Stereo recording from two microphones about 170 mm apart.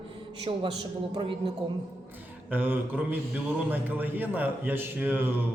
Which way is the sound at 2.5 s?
10° right (ahead or behind).